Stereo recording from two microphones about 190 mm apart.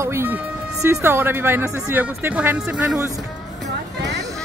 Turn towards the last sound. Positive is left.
turn(degrees=-5)  # may be behind; listen again after turning